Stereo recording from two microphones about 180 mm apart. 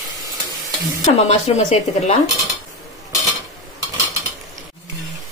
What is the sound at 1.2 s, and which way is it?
Speech, 35° left (ahead or behind).